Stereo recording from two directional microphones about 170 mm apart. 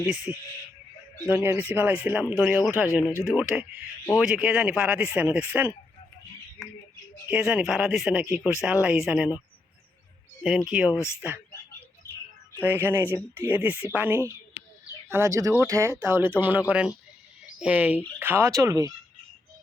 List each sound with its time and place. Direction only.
0.1 s speech: 5° right (ahead or behind)
7.3 s speech: 5° right (ahead or behind)
10.7 s speech: 5° right (ahead or behind)
12.6 s speech: 10° right (ahead or behind)